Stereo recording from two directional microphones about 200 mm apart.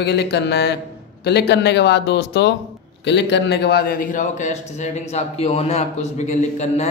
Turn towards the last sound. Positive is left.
turn(degrees=35)  # may be behind; listen again after turning